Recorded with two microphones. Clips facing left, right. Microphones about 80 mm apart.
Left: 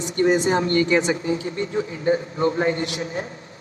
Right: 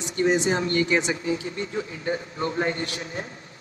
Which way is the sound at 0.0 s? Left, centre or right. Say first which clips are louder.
Left 3 dB; left.